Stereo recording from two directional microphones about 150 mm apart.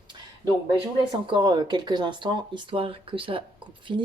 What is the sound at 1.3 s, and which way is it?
Speech, 30° right (ahead or behind).